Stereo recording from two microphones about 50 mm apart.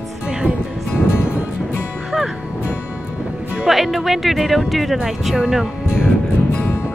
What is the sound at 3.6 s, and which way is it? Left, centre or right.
Speech, centre.